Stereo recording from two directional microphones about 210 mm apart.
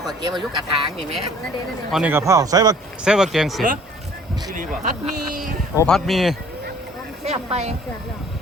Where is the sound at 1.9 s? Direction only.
5° right (ahead or behind).